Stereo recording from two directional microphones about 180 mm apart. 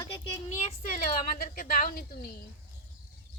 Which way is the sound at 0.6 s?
45° left (ahead or behind).